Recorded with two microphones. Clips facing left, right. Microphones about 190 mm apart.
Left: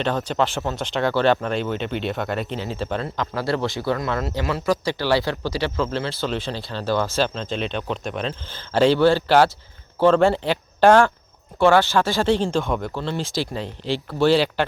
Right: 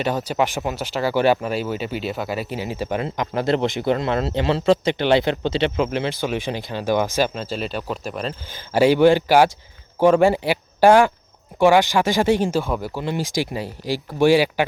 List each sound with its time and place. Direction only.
0.0 s speech: 10° right (ahead or behind)